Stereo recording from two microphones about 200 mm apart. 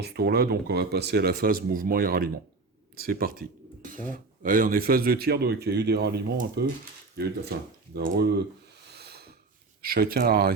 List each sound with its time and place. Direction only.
0.0 s speech: 55° right (ahead or behind)
7.9 s speech: 55° right (ahead or behind)
9.0 s snort: 50° right (ahead or behind)
9.8 s speech: 50° right (ahead or behind)